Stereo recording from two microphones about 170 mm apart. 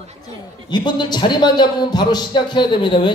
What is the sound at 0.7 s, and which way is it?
A man's voice, 25° left (ahead or behind).